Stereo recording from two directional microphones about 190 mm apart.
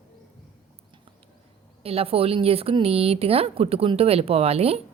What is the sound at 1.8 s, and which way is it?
A woman's voice, 30° right (ahead or behind).